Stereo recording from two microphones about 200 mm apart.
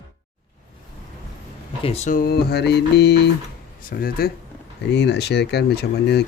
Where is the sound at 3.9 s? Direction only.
45° left (ahead or behind).